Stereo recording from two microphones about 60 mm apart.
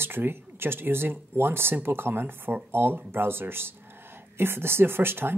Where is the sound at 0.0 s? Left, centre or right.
Right.